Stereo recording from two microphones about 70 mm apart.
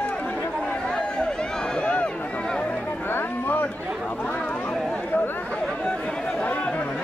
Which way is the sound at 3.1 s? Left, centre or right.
Left.